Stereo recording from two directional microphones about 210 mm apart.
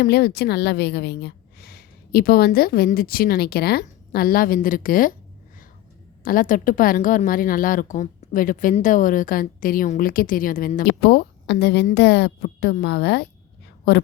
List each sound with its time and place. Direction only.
0.0 s a woman's voice: 50° left (ahead or behind)
6.2 s a woman's voice: 40° left (ahead or behind)